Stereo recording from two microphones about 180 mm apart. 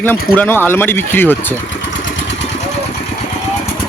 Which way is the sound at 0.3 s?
10° left (ahead or behind).